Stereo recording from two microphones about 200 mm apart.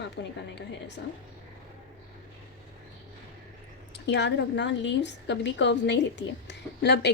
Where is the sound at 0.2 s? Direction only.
60° left (ahead or behind).